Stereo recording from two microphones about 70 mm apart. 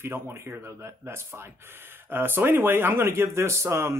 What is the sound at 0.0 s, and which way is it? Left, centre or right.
Speech, right.